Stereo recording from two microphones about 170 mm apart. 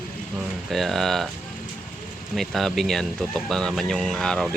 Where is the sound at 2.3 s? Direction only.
Centre (ahead or behind).